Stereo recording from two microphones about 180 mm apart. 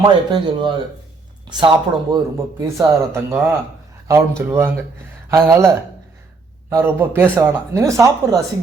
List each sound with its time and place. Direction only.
0.0 s speech: 25° right (ahead or behind)